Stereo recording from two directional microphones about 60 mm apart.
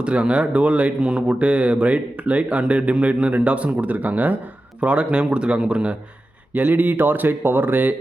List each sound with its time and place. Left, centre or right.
0.0 s speech: centre
6.7 s speech: right